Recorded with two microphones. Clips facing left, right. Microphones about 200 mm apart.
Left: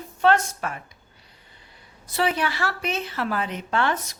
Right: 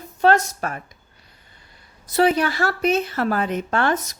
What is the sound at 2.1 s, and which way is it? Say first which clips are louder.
A woman's voice: right 6 dB; 40° right (ahead or behind).